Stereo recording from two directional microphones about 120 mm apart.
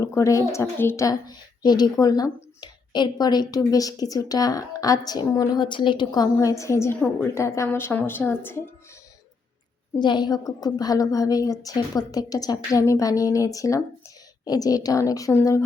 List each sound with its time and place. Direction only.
0.0 s a woman's voice: 25° left (ahead or behind)
5.5 s a woman's voice: 40° left (ahead or behind); by 8.6 s 20° left (ahead or behind)
10.0 s a woman's voice: 40° left (ahead or behind)